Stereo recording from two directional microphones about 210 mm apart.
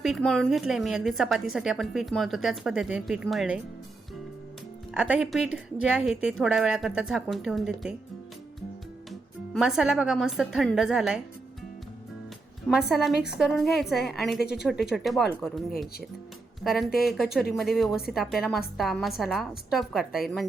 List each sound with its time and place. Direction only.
0.0 s a woman's voice: centre (ahead or behind)
4.9 s a woman's voice: 5° right (ahead or behind)
9.5 s a woman's voice: centre (ahead or behind)
12.9 s a woman's voice: centre (ahead or behind)
16.6 s a woman's voice: 5° right (ahead or behind)